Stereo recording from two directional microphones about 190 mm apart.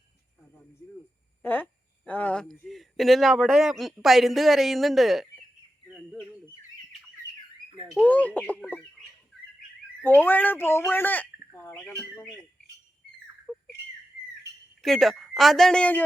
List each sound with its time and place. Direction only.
1.4 s a woman's voice: 10° left (ahead or behind)
8.0 s speech: 10° left (ahead or behind)
10.0 s a woman's voice: 10° left (ahead or behind)
13.5 s squawk: 10° left (ahead or behind)
14.8 s a woman's voice: centre (ahead or behind)